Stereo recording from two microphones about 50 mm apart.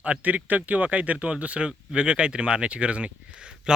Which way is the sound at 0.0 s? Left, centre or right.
Right.